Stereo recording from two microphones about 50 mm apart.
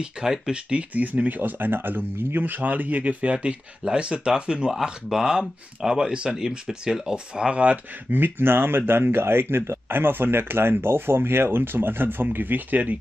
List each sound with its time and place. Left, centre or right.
0.0 s speech: centre
0.9 s speech: right
8.1 s speech: right